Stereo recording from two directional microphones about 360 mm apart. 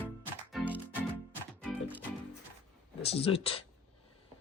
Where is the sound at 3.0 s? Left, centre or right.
Centre.